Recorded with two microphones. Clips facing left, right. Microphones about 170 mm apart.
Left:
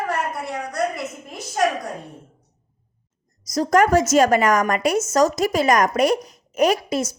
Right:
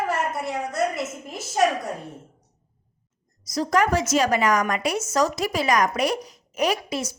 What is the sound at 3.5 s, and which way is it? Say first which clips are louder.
A woman's voice: left 5 dB; 45° left (ahead or behind).